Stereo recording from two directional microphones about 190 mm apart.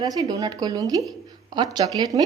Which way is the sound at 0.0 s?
20° right (ahead or behind).